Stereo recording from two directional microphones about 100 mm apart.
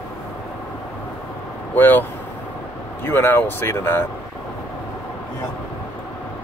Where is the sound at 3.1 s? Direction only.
20° left (ahead or behind).